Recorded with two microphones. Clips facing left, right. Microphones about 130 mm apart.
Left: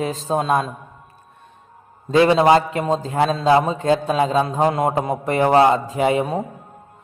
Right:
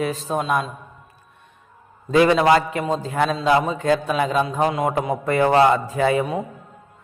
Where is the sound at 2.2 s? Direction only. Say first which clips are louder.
Left 2 dB; 25° left (ahead or behind).